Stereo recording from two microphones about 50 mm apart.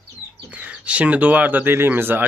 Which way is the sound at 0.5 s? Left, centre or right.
Right.